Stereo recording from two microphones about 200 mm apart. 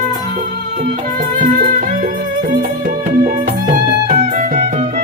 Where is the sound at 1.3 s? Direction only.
40° right (ahead or behind).